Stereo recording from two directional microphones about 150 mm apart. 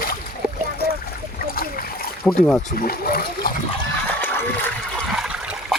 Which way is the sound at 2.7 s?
75° left (ahead or behind).